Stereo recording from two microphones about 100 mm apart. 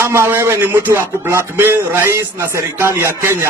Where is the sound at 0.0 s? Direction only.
25° right (ahead or behind).